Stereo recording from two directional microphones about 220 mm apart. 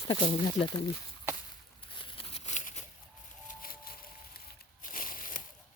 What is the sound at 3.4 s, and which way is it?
Music, 40° left (ahead or behind).